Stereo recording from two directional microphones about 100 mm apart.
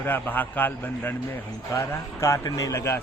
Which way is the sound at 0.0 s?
20° left (ahead or behind).